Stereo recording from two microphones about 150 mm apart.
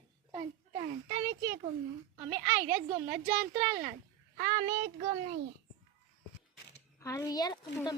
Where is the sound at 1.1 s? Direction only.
80° right.